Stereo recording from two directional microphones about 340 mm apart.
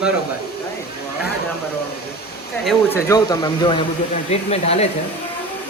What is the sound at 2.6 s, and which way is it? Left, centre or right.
Speech, centre.